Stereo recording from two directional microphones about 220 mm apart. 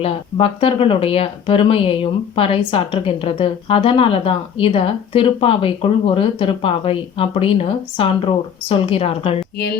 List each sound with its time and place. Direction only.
0.0 s speech: 25° left (ahead or behind)